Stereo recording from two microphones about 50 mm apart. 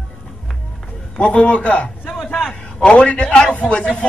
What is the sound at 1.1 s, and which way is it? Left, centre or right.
A man's voice, left.